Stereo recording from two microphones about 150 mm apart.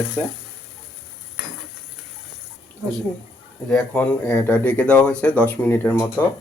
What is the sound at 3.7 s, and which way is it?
Speech, 10° left (ahead or behind).